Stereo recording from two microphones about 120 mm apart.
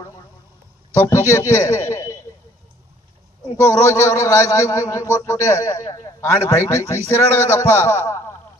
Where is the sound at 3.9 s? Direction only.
25° left (ahead or behind).